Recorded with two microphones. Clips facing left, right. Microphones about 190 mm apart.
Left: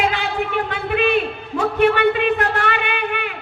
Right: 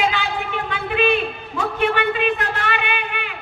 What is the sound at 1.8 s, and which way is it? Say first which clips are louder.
A man's voice: left 5 dB; 60° left (ahead or behind).